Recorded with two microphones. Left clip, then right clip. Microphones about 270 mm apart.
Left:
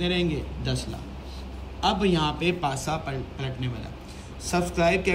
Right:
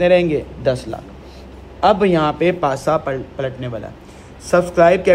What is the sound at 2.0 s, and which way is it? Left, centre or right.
Speech, centre.